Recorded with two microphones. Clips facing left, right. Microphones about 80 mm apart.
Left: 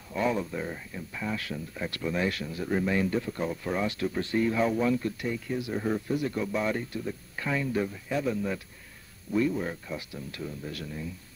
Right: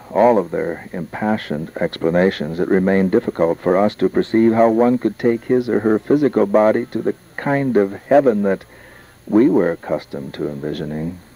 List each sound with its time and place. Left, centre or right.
0.1 s speech: right